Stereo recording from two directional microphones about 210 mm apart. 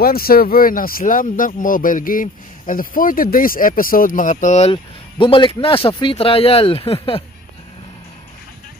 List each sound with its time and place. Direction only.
0.0 s speech: 45° left (ahead or behind); by 7.2 s 25° left (ahead or behind)